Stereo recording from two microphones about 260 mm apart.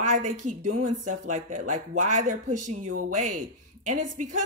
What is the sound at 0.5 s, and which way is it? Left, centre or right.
A woman's voice, right.